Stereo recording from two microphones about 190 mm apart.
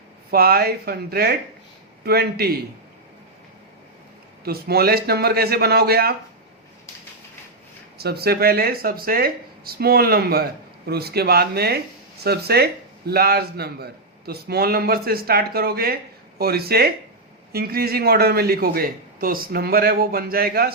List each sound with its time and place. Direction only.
0.3 s a man's voice: 55° right (ahead or behind)
4.4 s a man's voice: 55° right (ahead or behind)
7.9 s a man's voice: 55° right (ahead or behind)